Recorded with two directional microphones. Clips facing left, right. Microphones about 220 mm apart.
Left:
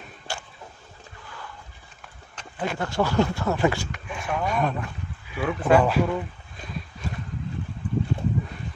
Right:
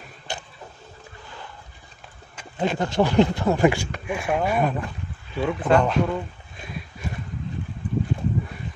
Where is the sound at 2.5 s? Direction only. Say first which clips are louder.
Right 4 dB; 20° right (ahead or behind); by 6.0 s 5° left (ahead or behind).